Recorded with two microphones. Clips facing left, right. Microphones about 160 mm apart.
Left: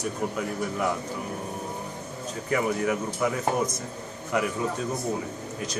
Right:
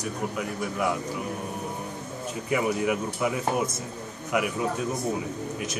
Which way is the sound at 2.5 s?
15° right (ahead or behind).